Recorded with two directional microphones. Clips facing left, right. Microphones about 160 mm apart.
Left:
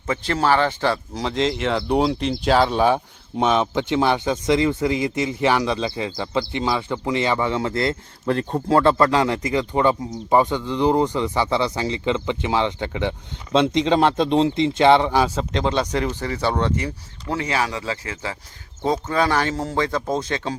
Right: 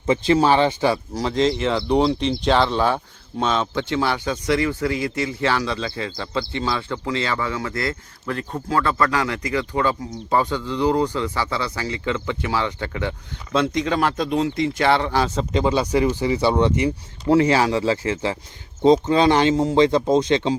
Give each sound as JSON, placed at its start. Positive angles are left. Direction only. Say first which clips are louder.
{"t": 0.0, "sound": "speech", "louder": "right 5 dB", "side_deg": -15}
{"t": 1.2, "sound": "speech", "louder": "right 2 dB", "side_deg": 0}
{"t": 15.4, "sound": "speech", "louder": "right 2 dB", "side_deg": -5}
{"t": 17.2, "sound": "speech", "louder": "right 8 dB", "side_deg": -30}